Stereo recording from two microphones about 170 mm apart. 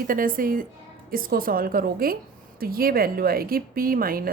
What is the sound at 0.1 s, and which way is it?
A woman's voice, 55° right (ahead or behind).